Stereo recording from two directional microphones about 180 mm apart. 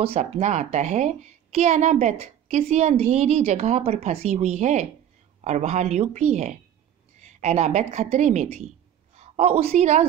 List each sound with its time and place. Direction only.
0.0 s a woman's voice: 35° right (ahead or behind)